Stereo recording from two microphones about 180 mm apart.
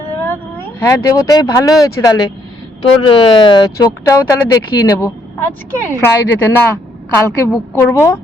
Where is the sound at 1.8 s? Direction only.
20° left (ahead or behind).